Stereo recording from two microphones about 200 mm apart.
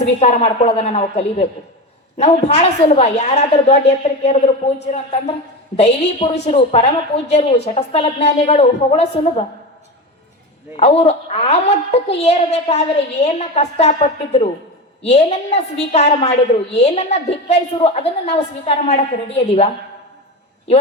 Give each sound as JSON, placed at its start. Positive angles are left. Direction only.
{"t": 0.0, "sound": "a woman's voice", "side_deg": 30}
{"t": 10.8, "sound": "a woman's voice", "side_deg": 30}